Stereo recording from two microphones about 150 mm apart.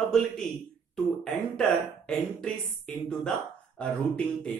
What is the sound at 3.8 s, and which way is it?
Speech, 5° left (ahead or behind).